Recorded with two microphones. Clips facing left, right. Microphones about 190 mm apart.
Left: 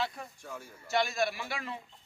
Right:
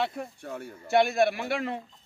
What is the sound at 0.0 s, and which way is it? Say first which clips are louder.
A man's voice: right 5 dB; 60° right (ahead or behind).